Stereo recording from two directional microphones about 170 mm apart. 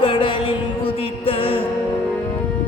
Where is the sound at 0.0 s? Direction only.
30° left (ahead or behind).